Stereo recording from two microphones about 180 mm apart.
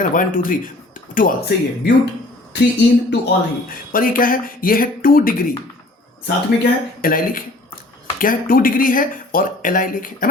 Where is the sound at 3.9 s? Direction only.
50° left (ahead or behind).